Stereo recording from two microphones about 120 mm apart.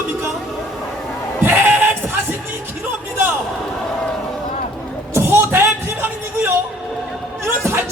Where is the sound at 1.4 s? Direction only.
15° right (ahead or behind).